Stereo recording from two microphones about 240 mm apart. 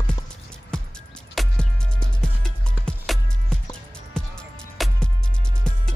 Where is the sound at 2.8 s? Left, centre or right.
Centre.